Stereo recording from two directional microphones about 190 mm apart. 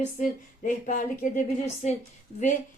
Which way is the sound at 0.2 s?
40° left (ahead or behind).